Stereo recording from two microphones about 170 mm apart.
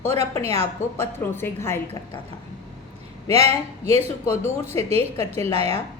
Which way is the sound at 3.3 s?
40° right (ahead or behind).